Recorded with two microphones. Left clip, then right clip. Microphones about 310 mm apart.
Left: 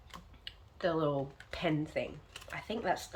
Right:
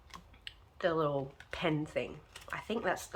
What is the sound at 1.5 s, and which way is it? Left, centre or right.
Speech, centre.